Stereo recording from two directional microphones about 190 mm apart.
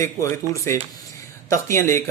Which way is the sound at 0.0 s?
15° left (ahead or behind).